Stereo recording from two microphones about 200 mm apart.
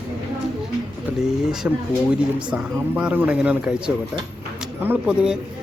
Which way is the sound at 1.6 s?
10° right (ahead or behind).